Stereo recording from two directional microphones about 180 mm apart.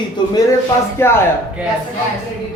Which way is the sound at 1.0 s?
15° left (ahead or behind).